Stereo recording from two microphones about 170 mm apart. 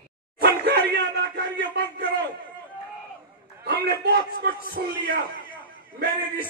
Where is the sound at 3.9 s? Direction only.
70° right (ahead or behind).